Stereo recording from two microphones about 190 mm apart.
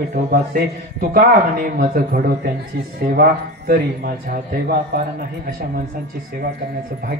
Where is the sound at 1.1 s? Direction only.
50° right (ahead or behind).